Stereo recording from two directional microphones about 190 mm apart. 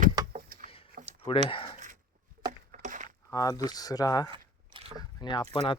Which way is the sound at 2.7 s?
40° right (ahead or behind).